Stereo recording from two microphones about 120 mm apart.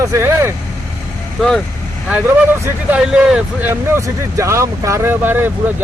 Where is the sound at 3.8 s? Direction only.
20° right (ahead or behind).